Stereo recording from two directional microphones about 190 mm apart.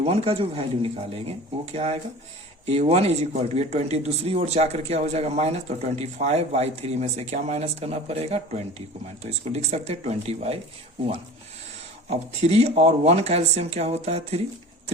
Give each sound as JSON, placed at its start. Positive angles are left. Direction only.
{"t": 0.0, "sound": "speech", "side_deg": -30}
{"t": 12.4, "sound": "speech", "side_deg": -35}